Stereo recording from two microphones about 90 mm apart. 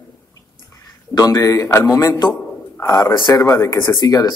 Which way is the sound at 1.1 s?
40° left (ahead or behind).